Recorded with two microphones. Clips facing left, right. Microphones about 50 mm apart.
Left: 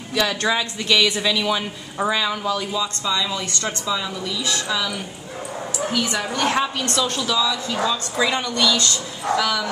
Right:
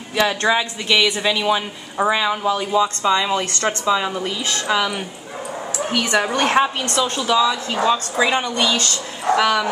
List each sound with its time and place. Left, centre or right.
0.1 s a woman's voice: right
6.6 s a woman's voice: right
8.2 s a woman's voice: right